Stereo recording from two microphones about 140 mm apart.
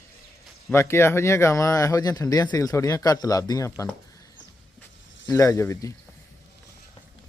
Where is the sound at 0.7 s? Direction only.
20° left (ahead or behind).